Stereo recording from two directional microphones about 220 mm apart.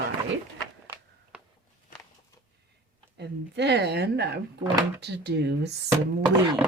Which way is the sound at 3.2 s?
50° right (ahead or behind).